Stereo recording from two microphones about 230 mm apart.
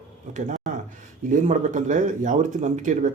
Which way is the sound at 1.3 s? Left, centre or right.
Right.